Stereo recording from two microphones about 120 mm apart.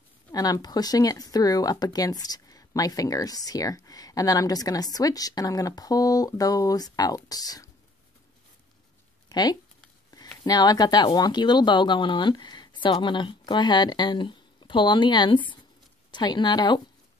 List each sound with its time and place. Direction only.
0.3 s speech: 30° left (ahead or behind)
9.3 s speech: 35° left (ahead or behind)